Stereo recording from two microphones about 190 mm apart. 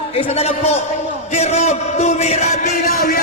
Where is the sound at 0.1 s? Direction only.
30° left (ahead or behind).